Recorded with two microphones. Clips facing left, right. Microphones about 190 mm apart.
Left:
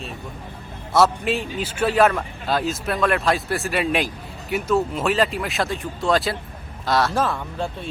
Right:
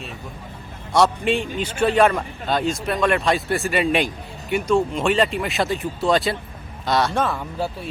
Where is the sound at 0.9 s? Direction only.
5° left (ahead or behind).